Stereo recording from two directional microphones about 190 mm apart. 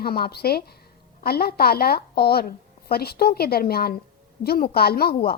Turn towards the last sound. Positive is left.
turn(degrees=55)  # may be behind; listen again after turning